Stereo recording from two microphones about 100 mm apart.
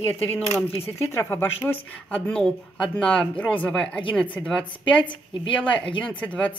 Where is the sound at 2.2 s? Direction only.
5° left (ahead or behind).